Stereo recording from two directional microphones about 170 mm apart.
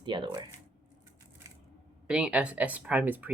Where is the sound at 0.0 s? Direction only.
25° right (ahead or behind).